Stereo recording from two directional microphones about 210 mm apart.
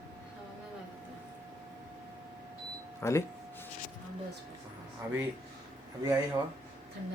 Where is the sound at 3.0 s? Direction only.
10° left (ahead or behind).